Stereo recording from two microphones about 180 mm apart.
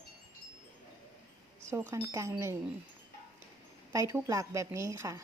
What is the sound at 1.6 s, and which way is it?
Speech, 15° right (ahead or behind).